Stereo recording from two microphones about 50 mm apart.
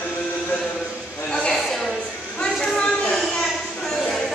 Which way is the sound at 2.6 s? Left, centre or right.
Centre.